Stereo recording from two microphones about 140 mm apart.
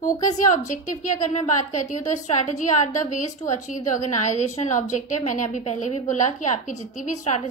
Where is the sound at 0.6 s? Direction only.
65° left (ahead or behind).